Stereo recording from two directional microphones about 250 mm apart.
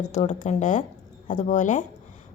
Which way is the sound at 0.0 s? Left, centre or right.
Left.